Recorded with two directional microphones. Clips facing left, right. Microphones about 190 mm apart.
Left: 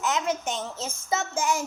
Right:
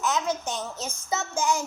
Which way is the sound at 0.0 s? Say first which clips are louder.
Even; 25° left (ahead or behind).